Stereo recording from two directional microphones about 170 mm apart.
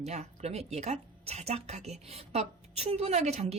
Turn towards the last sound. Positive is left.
turn(degrees=-40)  # may be behind; listen again after turning